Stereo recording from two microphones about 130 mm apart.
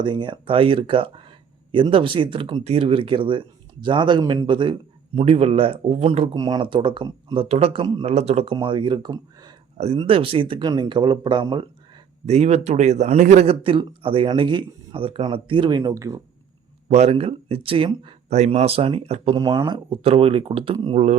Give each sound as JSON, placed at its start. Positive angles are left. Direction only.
{"t": 0.0, "sound": "a man's voice", "side_deg": -35}
{"t": 5.2, "sound": "speech", "side_deg": -50}
{"t": 6.3, "sound": "a man's voice", "side_deg": -30}
{"t": 8.0, "sound": "speech", "side_deg": -55}
{"t": 8.5, "sound": "a man's voice", "side_deg": -40}
{"t": 9.7, "sound": "a man's voice", "side_deg": -55}
{"t": 12.2, "sound": "speech", "side_deg": -55}
{"t": 16.9, "sound": "speech", "side_deg": -55}
{"t": 18.3, "sound": "speech", "side_deg": -60}
{"t": 19.6, "sound": "a man's voice", "side_deg": -35}
{"t": 20.0, "sound": "speech", "side_deg": -50}
{"t": 20.9, "sound": "speech", "side_deg": -65}